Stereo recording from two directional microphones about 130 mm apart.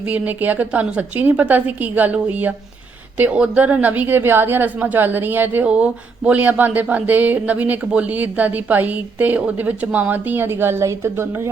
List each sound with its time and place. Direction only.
0.1 s a woman's voice: 15° right (ahead or behind)